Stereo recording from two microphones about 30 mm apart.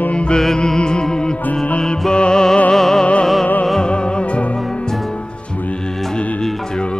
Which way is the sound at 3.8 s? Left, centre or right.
Left.